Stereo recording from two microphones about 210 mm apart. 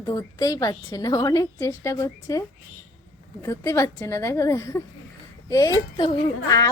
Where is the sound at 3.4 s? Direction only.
15° left (ahead or behind).